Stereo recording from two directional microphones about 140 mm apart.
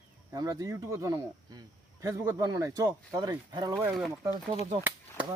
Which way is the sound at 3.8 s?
5° right (ahead or behind).